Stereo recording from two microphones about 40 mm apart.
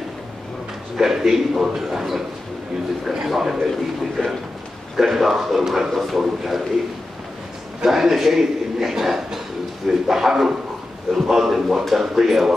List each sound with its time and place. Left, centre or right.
0.9 s a man's voice: centre
3.3 s a man's voice: centre
5.1 s a man's voice: centre
7.8 s a man's voice: centre